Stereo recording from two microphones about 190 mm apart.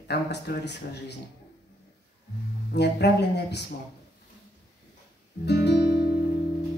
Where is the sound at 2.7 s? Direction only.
60° left (ahead or behind).